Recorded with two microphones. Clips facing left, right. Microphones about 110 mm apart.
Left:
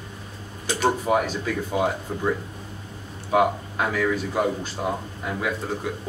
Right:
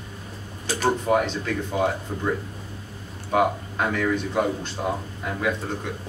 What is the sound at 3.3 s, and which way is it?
Speech, 5° left (ahead or behind).